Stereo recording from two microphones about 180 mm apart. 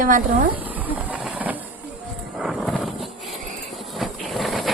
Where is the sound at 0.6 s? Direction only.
10° right (ahead or behind).